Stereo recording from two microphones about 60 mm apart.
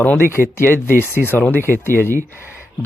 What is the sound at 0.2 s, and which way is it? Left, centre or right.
Speech, left.